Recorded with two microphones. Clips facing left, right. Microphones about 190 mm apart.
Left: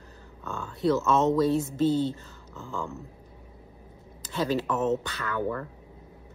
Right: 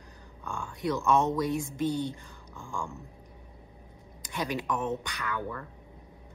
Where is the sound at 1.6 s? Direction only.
15° right (ahead or behind).